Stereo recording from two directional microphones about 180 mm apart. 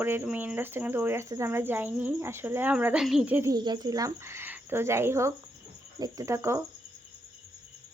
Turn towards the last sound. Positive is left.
turn(degrees=-15)  # may be behind; listen again after turning